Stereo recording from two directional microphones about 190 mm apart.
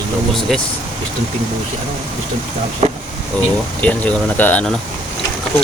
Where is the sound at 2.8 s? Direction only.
35° right (ahead or behind).